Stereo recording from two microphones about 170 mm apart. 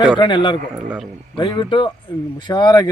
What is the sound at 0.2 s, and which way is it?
Speech, 30° left (ahead or behind).